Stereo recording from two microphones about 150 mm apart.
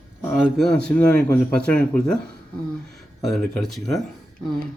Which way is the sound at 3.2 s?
Centre (ahead or behind).